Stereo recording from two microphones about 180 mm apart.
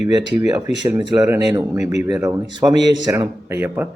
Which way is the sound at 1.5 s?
15° right (ahead or behind).